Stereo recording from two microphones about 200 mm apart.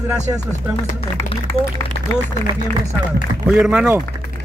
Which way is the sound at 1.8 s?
15° left (ahead or behind).